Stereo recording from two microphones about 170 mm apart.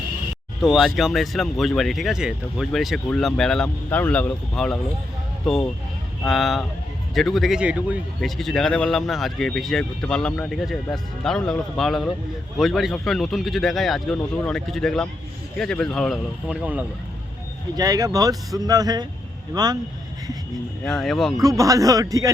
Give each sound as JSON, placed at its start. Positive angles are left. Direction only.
{"t": 0.6, "sound": "speech", "side_deg": 0}
{"t": 6.2, "sound": "speech", "side_deg": 0}
{"t": 17.7, "sound": "speech", "side_deg": -20}
{"t": 20.8, "sound": "speech", "side_deg": 5}
{"t": 21.4, "sound": "speech", "side_deg": -20}